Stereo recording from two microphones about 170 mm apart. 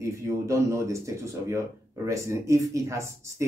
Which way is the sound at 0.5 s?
15° right (ahead or behind).